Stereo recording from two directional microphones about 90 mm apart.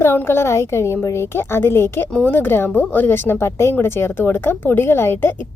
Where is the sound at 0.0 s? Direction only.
30° left (ahead or behind).